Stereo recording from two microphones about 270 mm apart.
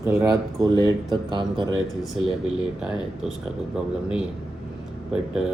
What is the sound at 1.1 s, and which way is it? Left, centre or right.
Speech, centre.